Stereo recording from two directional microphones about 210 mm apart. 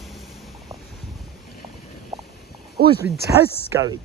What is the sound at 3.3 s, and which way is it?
Speech, 15° right (ahead or behind).